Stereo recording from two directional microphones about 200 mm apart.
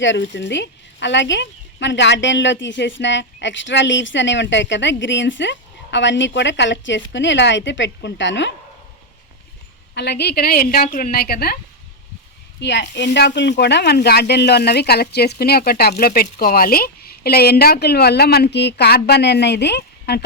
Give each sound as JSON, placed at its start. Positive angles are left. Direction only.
{"t": 0.0, "sound": "speech", "side_deg": 65}
{"t": 9.9, "sound": "speech", "side_deg": 55}
{"t": 12.5, "sound": "speech", "side_deg": 60}